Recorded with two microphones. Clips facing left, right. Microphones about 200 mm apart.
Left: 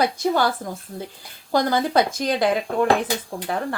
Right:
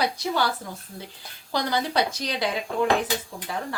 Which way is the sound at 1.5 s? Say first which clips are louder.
Left 6 dB; 50° left (ahead or behind).